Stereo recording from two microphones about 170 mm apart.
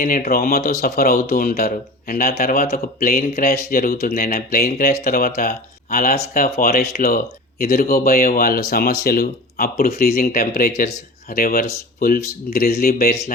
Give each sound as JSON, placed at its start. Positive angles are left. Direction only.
{"t": 0.0, "sound": "speech", "side_deg": 55}